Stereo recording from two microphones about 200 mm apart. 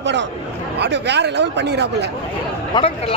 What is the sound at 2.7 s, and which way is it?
Speech, 30° left (ahead or behind).